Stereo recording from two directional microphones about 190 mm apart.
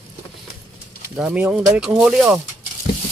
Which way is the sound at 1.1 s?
5° right (ahead or behind).